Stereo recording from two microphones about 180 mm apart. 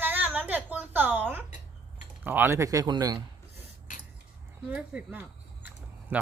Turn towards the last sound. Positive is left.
turn(degrees=-10)  # may be behind; listen again after turning